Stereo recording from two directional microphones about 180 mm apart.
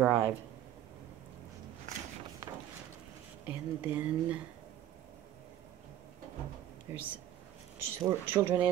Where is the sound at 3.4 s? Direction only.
10° right (ahead or behind).